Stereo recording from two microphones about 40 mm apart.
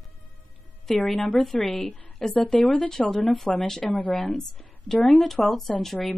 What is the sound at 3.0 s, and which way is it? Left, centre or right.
Speech, left.